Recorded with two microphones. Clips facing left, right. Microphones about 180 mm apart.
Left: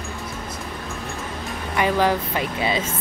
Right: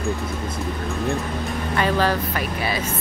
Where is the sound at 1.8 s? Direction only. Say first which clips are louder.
Left 1 dB; 15° left (ahead or behind).